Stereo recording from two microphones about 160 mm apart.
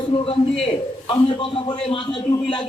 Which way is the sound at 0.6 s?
35° left (ahead or behind).